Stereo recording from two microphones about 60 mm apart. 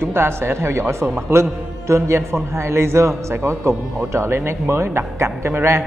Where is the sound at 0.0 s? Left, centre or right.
Right.